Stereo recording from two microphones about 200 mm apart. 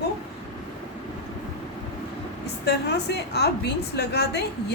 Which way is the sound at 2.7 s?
55° left (ahead or behind).